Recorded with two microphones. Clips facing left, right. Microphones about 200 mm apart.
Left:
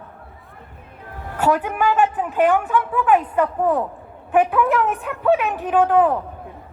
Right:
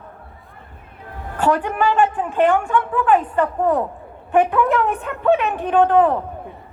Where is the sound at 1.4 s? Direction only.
10° left (ahead or behind).